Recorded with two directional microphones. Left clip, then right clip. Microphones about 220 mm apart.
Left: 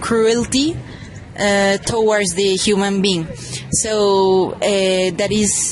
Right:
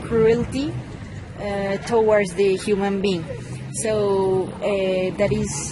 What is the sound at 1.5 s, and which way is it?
Speech, 45° left (ahead or behind).